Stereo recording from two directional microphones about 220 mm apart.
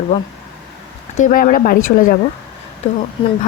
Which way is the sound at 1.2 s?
35° left (ahead or behind).